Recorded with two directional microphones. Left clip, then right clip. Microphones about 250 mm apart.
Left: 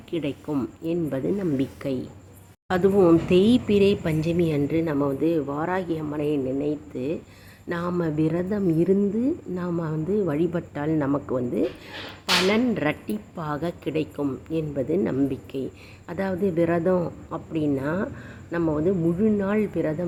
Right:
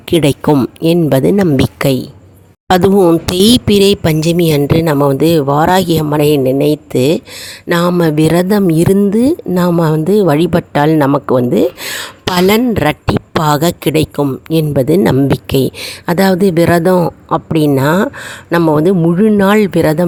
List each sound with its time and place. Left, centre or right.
0.1 s speech: right